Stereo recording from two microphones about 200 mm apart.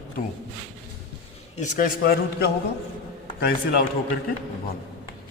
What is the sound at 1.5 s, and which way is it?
Speech, 40° left (ahead or behind).